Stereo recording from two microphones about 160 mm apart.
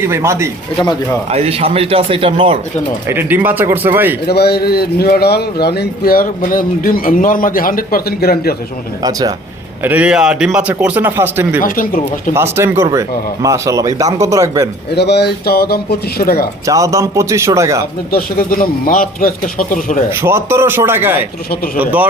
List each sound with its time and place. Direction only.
0.0 s speech: 15° right (ahead or behind)
1.3 s speech: 40° right (ahead or behind)
3.1 s speech: 15° right (ahead or behind)
4.3 s a man's voice: 85° left
9.0 s speech: 25° right (ahead or behind)
9.8 s speech: 10° right (ahead or behind)
11.6 s speech: 60° left (ahead or behind)
12.3 s speech: 15° right (ahead or behind)
14.9 s a man's voice: 90° left; by 16.5 s 70° left (ahead or behind)
16.6 s speech: 20° right (ahead or behind)
18.1 s speech: 65° left (ahead or behind)
20.1 s speech: 15° right (ahead or behind)